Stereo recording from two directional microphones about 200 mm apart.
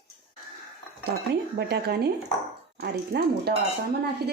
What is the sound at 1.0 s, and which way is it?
Speech, 50° right (ahead or behind).